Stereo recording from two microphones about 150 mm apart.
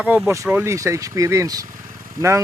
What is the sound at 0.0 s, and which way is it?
Speech, 10° right (ahead or behind).